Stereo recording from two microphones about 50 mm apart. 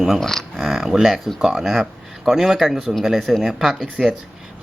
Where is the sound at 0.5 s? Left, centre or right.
Centre.